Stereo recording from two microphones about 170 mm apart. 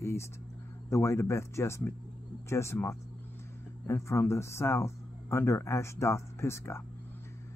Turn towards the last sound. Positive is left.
turn(degrees=15)  # may be behind; listen again after turning